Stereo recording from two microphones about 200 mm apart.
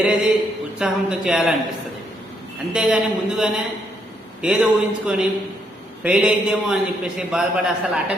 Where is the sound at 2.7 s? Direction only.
5° right (ahead or behind).